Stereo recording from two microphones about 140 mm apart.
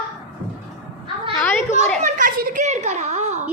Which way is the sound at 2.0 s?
65° right (ahead or behind).